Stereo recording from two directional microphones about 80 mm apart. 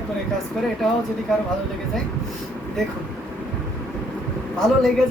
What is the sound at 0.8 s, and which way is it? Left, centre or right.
Speech, centre.